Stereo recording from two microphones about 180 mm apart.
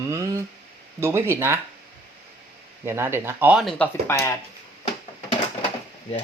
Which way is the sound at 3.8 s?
15° left (ahead or behind).